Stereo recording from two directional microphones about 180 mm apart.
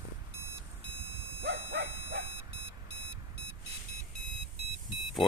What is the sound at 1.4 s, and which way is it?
Dog, 90° right.